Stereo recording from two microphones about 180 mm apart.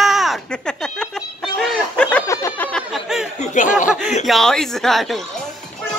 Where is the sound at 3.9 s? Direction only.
5° right (ahead or behind).